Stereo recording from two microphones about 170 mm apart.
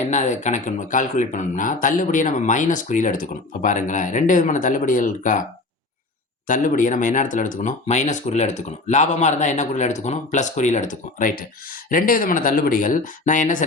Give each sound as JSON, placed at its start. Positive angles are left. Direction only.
{"t": 0.0, "sound": "speech", "side_deg": 45}
{"t": 6.5, "sound": "speech", "side_deg": 50}